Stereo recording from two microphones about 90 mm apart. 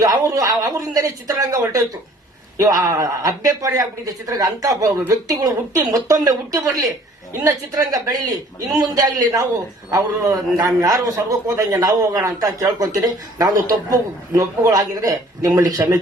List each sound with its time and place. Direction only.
0.0 s a man's voice: 40° right (ahead or behind)